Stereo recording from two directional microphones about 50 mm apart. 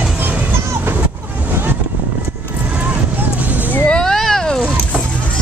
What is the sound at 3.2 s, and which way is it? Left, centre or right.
Music, right.